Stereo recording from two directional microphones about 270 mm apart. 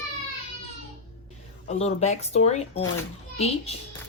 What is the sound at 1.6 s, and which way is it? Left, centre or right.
Speech, left.